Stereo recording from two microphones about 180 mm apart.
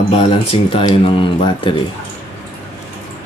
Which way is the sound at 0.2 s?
30° left (ahead or behind).